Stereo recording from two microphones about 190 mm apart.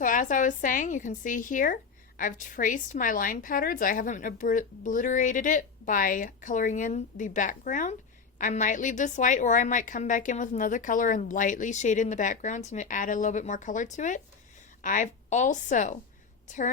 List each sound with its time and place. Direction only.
0.0 s a woman's voice: 45° left (ahead or behind)